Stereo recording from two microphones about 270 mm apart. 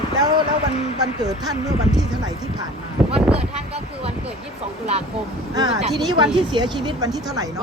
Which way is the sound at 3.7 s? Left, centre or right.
Right.